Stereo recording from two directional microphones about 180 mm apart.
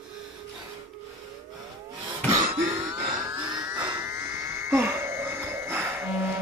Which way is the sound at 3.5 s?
20° right (ahead or behind).